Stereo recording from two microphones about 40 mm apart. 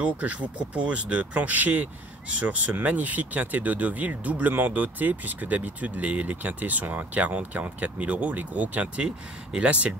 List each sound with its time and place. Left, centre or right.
0.0 s speech: right
2.2 s speech: right
6.6 s speech: right